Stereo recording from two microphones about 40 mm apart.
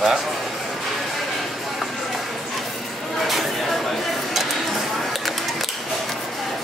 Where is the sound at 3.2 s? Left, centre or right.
Centre.